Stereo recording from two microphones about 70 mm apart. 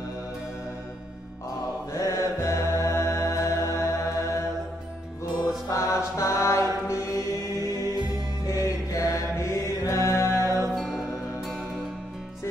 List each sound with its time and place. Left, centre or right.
2.0 s mantra: left
5.7 s mantra: left
8.5 s mantra: left
10.4 s music: right
10.7 s music: centre